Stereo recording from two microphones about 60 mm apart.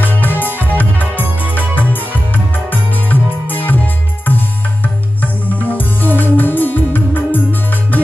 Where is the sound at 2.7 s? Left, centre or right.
Left.